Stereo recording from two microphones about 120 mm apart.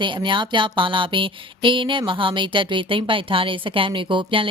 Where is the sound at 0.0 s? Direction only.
40° right (ahead or behind).